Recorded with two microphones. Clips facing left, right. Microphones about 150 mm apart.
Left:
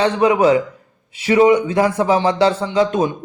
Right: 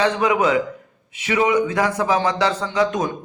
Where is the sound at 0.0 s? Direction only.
30° left (ahead or behind).